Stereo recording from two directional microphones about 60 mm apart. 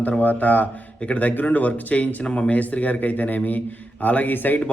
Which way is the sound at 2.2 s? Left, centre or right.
Centre.